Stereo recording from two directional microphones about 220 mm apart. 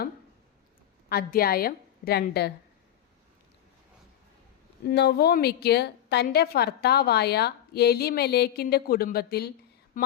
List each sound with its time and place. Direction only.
1.1 s a woman's voice: 45° left (ahead or behind)
4.9 s a woman's voice: 50° left (ahead or behind)